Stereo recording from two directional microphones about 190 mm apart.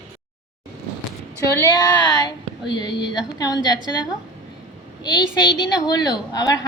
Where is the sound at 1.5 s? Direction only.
20° left (ahead or behind).